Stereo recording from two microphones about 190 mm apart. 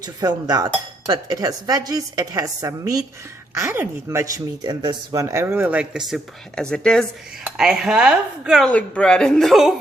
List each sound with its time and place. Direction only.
0.0 s speech: 20° right (ahead or behind); by 9.7 s centre (ahead or behind)